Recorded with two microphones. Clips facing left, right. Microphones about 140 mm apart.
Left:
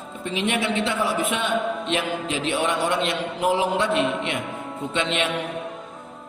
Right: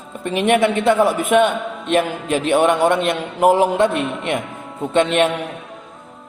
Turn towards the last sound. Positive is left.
turn(degrees=-50)  # may be behind; listen again after turning